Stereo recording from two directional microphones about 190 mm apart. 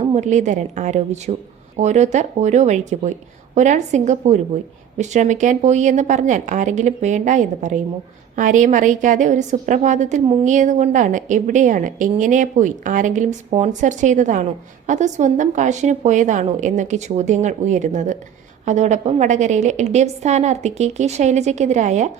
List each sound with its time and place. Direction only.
0.0 s a woman's voice: 35° right (ahead or behind)